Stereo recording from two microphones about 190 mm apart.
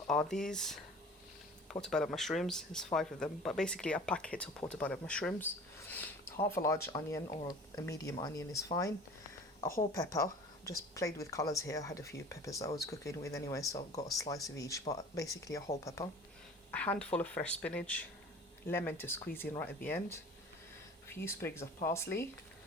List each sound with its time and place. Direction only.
0.1 s speech: 5° left (ahead or behind)
1.8 s speech: 5° left (ahead or behind)
5.9 s a sound: 10° left (ahead or behind)
6.8 s speech: 15° left (ahead or behind)
9.9 s speech: 15° left (ahead or behind)